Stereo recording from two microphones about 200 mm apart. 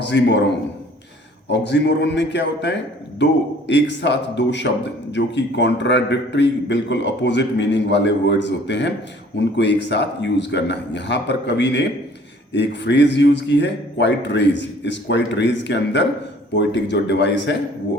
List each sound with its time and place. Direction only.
0.0 s a man's voice: 60° left (ahead or behind)
1.5 s speech: 60° left (ahead or behind)